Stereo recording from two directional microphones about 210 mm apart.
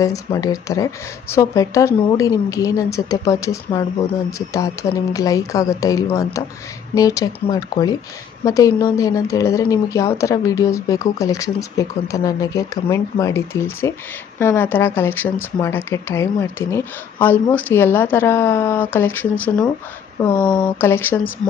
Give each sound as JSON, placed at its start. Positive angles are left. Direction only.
{"t": 0.0, "sound": "speech", "side_deg": 15}